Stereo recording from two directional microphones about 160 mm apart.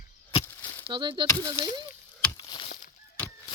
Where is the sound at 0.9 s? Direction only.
30° right (ahead or behind).